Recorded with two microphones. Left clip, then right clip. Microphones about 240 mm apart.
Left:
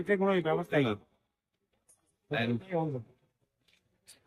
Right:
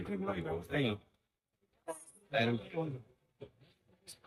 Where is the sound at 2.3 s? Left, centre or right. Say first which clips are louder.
Even; centre.